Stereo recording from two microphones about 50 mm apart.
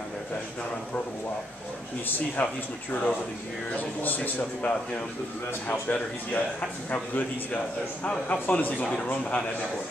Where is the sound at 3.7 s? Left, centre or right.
Left.